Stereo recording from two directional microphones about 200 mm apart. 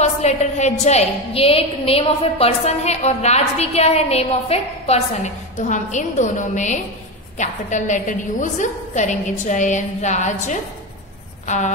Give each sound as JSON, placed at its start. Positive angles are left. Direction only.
{"t": 0.0, "sound": "a woman's voice", "side_deg": 35}